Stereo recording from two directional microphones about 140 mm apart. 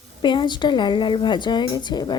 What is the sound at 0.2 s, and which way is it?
A woman's voice, 35° left (ahead or behind).